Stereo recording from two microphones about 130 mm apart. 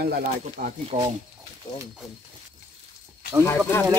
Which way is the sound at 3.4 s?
20° left (ahead or behind).